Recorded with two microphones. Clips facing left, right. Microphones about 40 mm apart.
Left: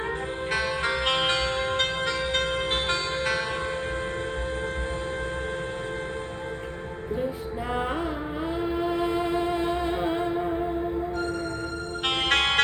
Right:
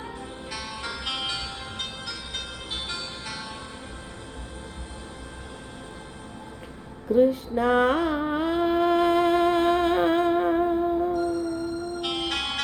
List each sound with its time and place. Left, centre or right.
0.5 s music: left
7.1 s music: right
11.1 s music: left